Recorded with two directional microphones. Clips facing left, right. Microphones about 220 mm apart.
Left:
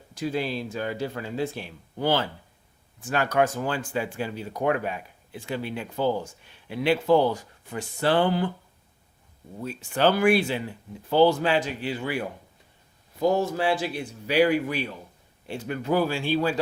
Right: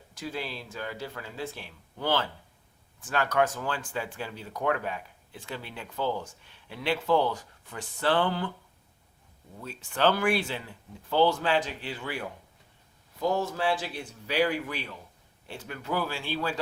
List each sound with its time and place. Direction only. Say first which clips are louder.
0.1 s speech: left 8 dB; 15° left (ahead or behind)
9.6 s speech: left 3 dB; 10° left (ahead or behind)
13.2 s speech: left 5 dB; 10° left (ahead or behind)